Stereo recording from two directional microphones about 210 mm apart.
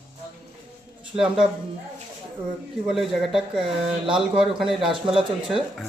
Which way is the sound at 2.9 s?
Centre (ahead or behind).